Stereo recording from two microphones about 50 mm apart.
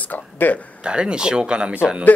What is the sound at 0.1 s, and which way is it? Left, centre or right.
Speech, left.